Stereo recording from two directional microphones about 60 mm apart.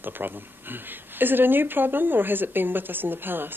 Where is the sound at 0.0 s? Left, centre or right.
Right.